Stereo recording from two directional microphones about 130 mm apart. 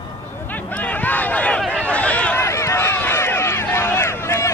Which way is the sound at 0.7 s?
10° left (ahead or behind).